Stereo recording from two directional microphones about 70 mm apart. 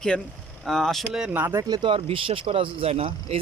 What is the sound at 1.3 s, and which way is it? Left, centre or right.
Speech, right.